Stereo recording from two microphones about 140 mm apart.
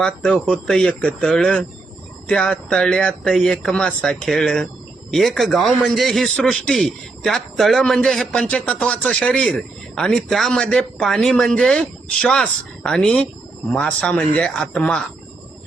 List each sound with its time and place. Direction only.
0.0 s a man's voice: 5° left (ahead or behind)